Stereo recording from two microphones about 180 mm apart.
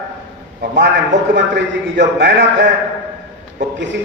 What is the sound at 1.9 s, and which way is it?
Speech, 75° right (ahead or behind).